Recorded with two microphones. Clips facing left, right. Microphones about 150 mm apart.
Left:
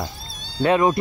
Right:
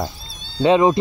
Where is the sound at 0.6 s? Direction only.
20° right (ahead or behind).